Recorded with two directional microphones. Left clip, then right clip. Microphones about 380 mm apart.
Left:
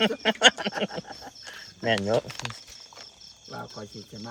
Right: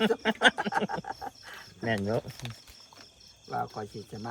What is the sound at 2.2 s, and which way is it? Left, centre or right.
Speech, left.